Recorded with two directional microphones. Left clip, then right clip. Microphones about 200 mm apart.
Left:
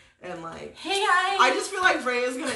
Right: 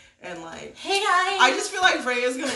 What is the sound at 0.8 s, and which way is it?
Speech, 15° right (ahead or behind).